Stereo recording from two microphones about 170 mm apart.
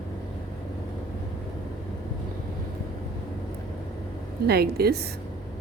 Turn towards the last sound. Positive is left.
turn(degrees=-70)  # may be behind; listen again after turning